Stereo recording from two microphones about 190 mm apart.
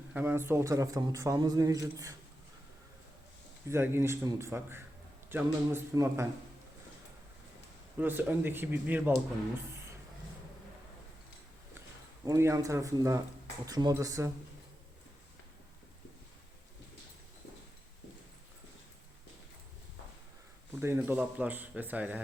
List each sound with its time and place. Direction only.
0.1 s a man's voice: 10° right (ahead or behind)
3.7 s a man's voice: 15° right (ahead or behind)
7.9 s a man's voice: 10° right (ahead or behind)
12.2 s a man's voice: 15° right (ahead or behind)
20.8 s a man's voice: 10° right (ahead or behind)